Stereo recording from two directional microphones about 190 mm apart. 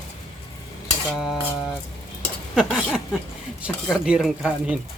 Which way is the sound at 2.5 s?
Centre (ahead or behind).